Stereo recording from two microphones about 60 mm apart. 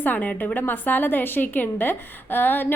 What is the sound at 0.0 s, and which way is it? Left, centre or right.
A woman's voice, left.